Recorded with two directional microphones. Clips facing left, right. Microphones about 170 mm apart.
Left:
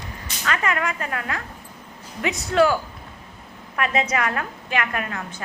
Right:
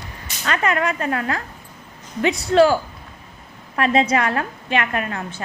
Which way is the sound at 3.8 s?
30° right (ahead or behind).